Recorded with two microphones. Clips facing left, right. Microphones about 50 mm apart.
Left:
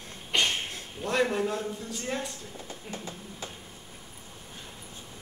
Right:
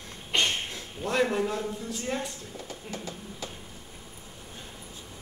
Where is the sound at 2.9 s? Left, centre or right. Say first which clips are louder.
Right 1 dB; left.